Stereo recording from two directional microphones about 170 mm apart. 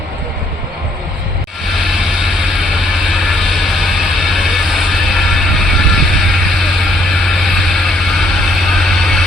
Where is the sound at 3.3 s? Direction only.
Centre (ahead or behind).